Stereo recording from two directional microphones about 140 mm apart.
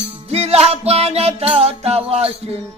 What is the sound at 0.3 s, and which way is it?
Music, 50° right (ahead or behind).